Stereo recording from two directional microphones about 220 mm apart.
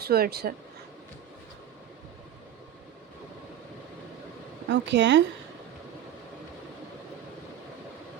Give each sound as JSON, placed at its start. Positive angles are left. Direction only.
{"t": 0.0, "sound": "speech", "side_deg": -45}
{"t": 4.7, "sound": "speech", "side_deg": -55}